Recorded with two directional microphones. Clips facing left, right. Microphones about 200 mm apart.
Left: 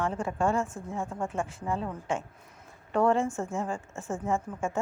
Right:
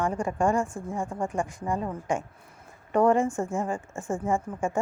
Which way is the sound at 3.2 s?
Centre (ahead or behind).